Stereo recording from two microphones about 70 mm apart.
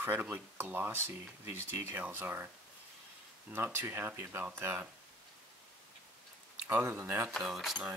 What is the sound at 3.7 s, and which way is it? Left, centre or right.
Speech, right.